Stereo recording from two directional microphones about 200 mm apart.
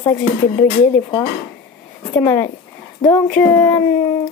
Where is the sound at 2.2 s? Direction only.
10° left (ahead or behind).